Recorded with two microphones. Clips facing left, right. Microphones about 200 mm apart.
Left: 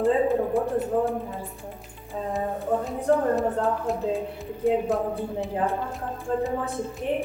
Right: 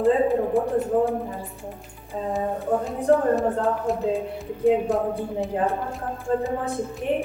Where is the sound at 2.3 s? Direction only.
Centre (ahead or behind).